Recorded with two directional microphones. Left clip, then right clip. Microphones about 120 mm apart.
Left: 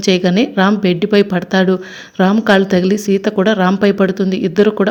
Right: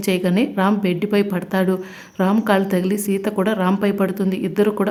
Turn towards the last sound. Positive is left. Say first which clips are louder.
# left 6 dB
turn(degrees=20)  # may be behind; listen again after turning